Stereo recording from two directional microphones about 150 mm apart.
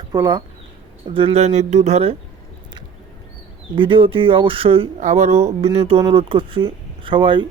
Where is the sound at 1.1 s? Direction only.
40° right (ahead or behind).